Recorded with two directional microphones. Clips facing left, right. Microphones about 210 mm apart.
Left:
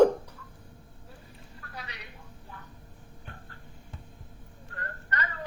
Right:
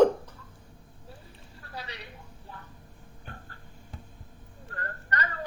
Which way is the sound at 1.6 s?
30° right (ahead or behind).